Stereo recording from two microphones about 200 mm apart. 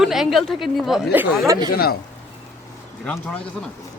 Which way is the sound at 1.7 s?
50° left (ahead or behind).